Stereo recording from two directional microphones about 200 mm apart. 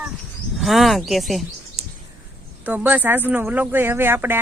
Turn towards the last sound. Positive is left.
turn(degrees=-10)  # may be behind; listen again after turning